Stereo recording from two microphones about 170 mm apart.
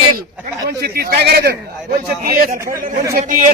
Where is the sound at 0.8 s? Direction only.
65° right (ahead or behind).